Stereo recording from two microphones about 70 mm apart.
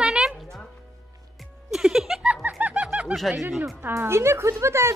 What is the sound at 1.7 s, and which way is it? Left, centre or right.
Giggle, centre.